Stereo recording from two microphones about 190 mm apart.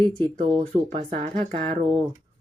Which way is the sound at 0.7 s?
35° right (ahead or behind).